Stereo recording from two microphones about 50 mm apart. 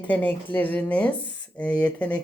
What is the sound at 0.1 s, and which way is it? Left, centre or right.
Speech, left.